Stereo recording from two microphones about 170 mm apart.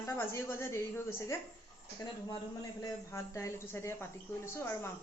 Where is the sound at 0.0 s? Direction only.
15° left (ahead or behind).